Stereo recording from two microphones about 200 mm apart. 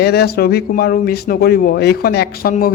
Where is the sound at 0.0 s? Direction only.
55° left (ahead or behind).